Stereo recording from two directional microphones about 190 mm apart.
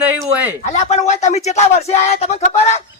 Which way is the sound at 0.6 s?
35° left (ahead or behind).